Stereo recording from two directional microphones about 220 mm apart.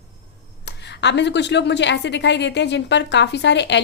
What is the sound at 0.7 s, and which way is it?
A woman's voice, 50° left (ahead or behind).